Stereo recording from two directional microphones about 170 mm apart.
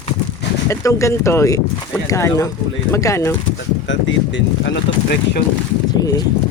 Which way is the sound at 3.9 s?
90° left.